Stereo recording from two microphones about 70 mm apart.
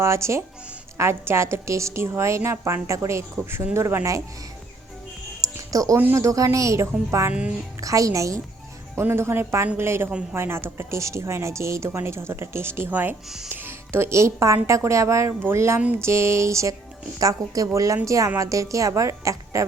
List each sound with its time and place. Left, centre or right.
0.0 s a woman's voice: right
5.4 s music: right
6.1 s a woman's voice: right
9.0 s speech: right
13.2 s speech: centre
13.5 s a woman's voice: right
15.4 s a woman's voice: right
17.2 s a woman's voice: right